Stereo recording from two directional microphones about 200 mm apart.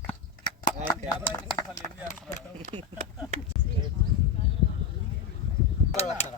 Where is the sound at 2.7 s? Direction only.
35° right (ahead or behind).